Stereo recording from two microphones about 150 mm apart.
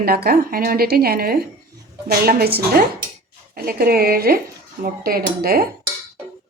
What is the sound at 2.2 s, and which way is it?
Dishes, 85° right.